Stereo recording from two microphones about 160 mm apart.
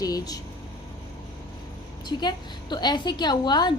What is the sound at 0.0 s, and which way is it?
Speech, 25° left (ahead or behind).